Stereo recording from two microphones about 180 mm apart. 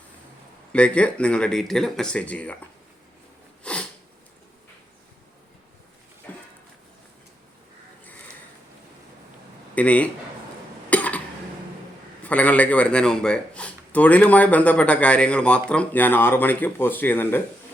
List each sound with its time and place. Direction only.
0.7 s a man's voice: 5° left (ahead or behind)
3.6 s sneeze: 5° left (ahead or behind)
6.3 s a sound: 10° left (ahead or behind)
9.7 s a man's voice: 10° left (ahead or behind)
10.8 s cough: 10° left (ahead or behind)
12.2 s a man's voice: 10° left (ahead or behind)